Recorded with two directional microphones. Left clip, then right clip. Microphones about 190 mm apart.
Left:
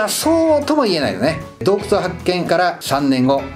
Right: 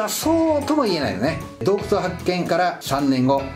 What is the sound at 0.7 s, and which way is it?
Speech, 20° left (ahead or behind).